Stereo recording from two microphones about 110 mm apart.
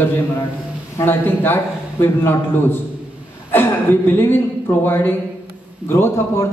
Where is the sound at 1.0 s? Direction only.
20° left (ahead or behind).